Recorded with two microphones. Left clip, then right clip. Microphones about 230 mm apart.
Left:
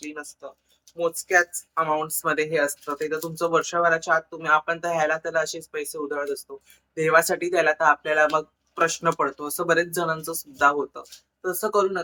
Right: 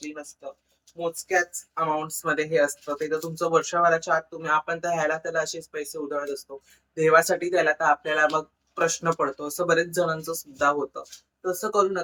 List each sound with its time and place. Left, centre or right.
0.0 s speech: centre
0.9 s speech: centre